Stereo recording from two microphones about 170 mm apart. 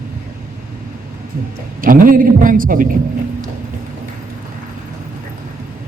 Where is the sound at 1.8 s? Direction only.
55° right (ahead or behind).